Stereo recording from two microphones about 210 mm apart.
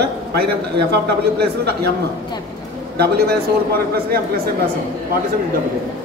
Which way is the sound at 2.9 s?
50° right (ahead or behind).